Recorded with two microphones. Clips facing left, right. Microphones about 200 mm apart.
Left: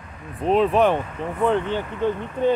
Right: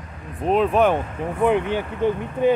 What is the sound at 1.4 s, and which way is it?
Speech, 15° right (ahead or behind).